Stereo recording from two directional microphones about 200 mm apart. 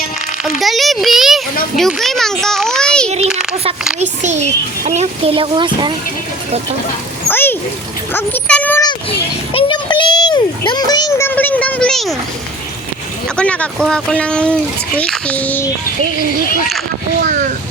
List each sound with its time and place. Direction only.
0.4 s a sound: centre (ahead or behind)
1.7 s a child's voice: centre (ahead or behind)
4.0 s a child's voice: 35° right (ahead or behind)
7.3 s splash: 10° left (ahead or behind)
8.1 s speech: 5° left (ahead or behind)
8.8 s a child's voice: 25° left (ahead or behind)
11.3 s speech: 10° left (ahead or behind)
13.2 s speech: 5° left (ahead or behind)
17.2 s a child's voice: 40° right (ahead or behind)